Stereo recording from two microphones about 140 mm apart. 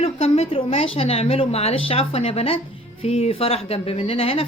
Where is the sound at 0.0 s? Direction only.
45° left (ahead or behind).